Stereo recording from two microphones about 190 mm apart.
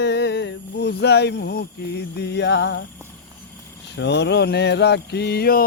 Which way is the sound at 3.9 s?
65° left (ahead or behind).